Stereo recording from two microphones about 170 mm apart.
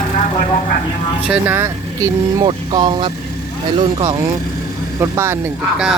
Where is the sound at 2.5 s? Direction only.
25° right (ahead or behind).